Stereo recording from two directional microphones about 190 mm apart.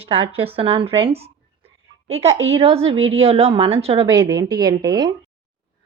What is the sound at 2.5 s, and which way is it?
A woman's voice, 30° right (ahead or behind).